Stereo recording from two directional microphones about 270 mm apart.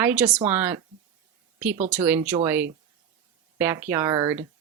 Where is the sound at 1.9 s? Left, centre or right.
Centre.